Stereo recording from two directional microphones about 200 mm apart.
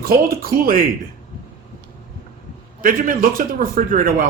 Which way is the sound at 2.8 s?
45° right (ahead or behind).